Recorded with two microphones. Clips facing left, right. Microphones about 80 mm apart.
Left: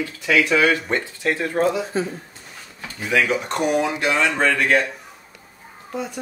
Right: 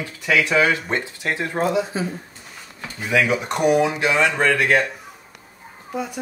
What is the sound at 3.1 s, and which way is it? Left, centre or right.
Speech, centre.